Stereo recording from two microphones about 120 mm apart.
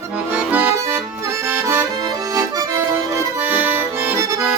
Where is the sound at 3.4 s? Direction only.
15° right (ahead or behind).